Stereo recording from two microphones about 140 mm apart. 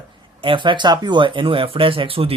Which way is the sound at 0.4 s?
35° right (ahead or behind).